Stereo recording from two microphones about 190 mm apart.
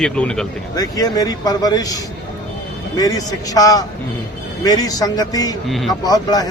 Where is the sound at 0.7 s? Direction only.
20° left (ahead or behind).